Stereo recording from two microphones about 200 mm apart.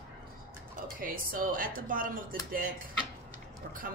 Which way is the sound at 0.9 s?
45° right (ahead or behind).